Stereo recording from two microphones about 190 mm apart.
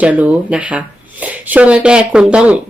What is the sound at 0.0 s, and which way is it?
A woman's voice, 5° right (ahead or behind).